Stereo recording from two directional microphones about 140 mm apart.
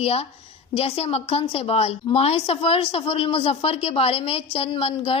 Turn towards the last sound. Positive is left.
turn(degrees=45)  # may be behind; listen again after turning